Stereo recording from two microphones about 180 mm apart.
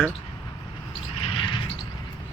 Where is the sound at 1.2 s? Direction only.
30° left (ahead or behind).